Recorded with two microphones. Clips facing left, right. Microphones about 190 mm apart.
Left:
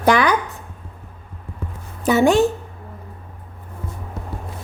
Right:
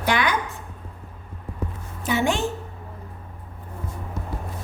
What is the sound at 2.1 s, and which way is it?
Speech, 40° left (ahead or behind).